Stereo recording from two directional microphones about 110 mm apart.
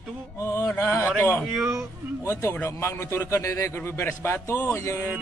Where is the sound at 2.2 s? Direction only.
25° left (ahead or behind).